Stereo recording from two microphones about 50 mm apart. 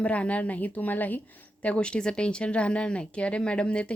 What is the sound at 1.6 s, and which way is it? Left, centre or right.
Speech, left.